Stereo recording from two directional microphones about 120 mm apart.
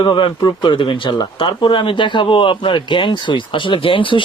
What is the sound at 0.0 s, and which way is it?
Speech, 40° left (ahead or behind).